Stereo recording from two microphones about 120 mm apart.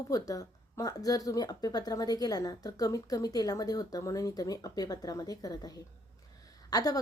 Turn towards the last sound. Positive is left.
turn(degrees=30)  # may be behind; listen again after turning